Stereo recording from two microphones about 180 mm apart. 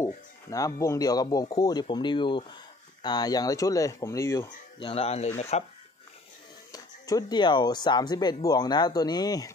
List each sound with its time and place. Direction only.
0.5 s speech: 20° left (ahead or behind)
4.7 s speech: 30° left (ahead or behind)
6.7 s speech: 20° left (ahead or behind)